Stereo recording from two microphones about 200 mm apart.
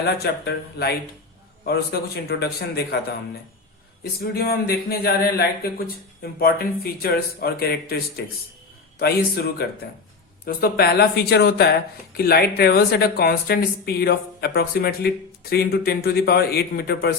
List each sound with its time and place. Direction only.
0.0 s a man's voice: 55° left (ahead or behind)